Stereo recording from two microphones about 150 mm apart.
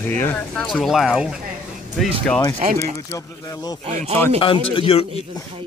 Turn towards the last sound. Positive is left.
turn(degrees=40)  # may be behind; listen again after turning